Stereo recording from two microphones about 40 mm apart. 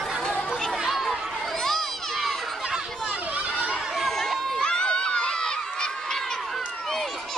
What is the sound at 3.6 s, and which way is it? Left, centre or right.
Chatter, centre.